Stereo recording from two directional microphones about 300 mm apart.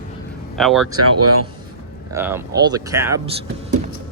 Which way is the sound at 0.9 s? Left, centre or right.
Right.